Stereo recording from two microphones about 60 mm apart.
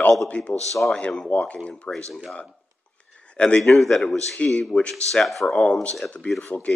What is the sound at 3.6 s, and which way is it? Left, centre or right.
A man's voice, centre.